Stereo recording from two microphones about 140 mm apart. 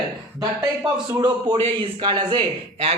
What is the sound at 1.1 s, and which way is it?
Speech, 30° right (ahead or behind).